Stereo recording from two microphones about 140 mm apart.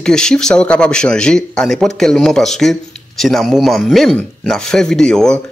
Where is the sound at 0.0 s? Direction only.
5° left (ahead or behind).